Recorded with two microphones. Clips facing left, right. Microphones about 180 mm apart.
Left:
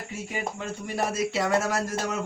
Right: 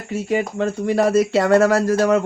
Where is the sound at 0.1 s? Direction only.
70° right (ahead or behind).